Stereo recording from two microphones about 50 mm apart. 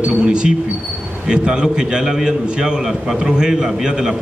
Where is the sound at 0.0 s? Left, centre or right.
Centre.